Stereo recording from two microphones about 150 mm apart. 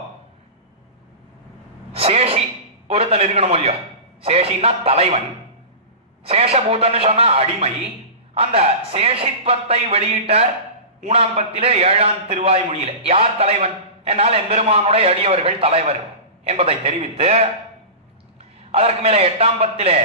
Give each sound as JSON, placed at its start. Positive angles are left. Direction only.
{"t": 1.9, "sound": "a sound", "side_deg": -40}
{"t": 2.9, "sound": "a man's voice", "side_deg": -40}
{"t": 6.2, "sound": "a man's voice", "side_deg": -40}
{"t": 18.7, "sound": "a man's voice", "side_deg": -40}